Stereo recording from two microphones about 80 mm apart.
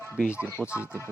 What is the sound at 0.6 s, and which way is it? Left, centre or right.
Speech, left.